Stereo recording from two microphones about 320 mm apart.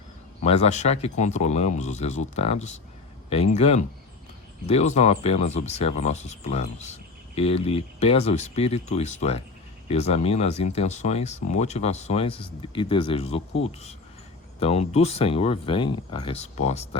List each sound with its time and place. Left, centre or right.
0.4 s speech: centre
14.6 s speech: centre